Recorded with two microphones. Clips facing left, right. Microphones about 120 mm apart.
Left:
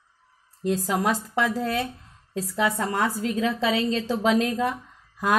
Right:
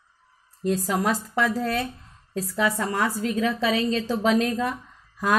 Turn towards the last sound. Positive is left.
turn(degrees=20)  # may be behind; listen again after turning